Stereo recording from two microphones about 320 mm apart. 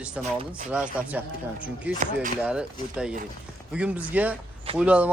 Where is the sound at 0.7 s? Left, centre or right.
Centre.